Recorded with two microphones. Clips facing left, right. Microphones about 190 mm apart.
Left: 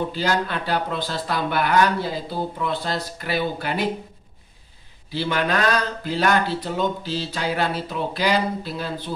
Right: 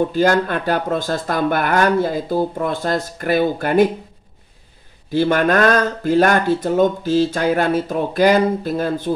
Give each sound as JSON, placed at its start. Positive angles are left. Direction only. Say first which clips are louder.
{"t": 0.1, "sound": "speech", "louder": "right 7 dB", "side_deg": -50}
{"t": 5.1, "sound": "speech", "louder": "right 8 dB", "side_deg": -50}